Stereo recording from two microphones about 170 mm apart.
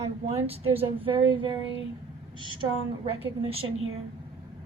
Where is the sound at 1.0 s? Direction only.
30° right (ahead or behind).